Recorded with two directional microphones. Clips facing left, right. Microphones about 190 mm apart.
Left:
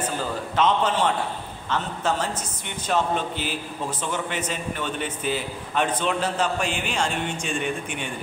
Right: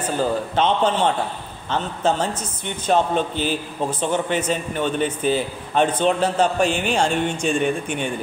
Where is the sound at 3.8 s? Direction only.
30° right (ahead or behind).